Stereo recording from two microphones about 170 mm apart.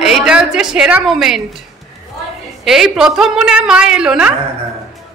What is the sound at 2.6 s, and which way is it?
A woman's voice, centre (ahead or behind).